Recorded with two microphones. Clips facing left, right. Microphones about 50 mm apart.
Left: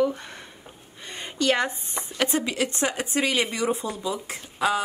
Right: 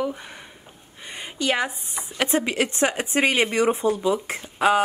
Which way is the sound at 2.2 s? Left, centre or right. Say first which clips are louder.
Right 4 dB; right.